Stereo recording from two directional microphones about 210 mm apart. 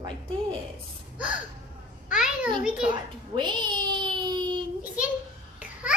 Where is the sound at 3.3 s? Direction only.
20° right (ahead or behind).